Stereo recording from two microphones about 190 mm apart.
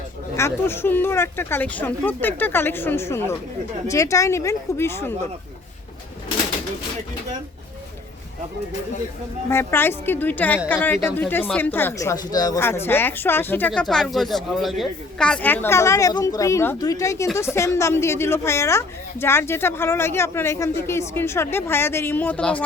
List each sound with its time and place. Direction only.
0.3 s speech: 15° left (ahead or behind)
9.5 s speech: 15° left (ahead or behind)